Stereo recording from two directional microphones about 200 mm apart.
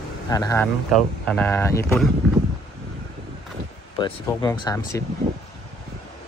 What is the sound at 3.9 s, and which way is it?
Speech, 20° left (ahead or behind).